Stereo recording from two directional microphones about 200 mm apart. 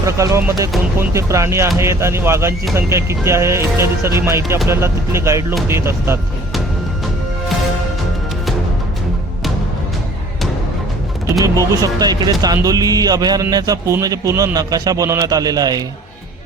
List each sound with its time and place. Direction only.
0.0 s a man's voice: 15° right (ahead or behind)
11.3 s a man's voice: 15° right (ahead or behind)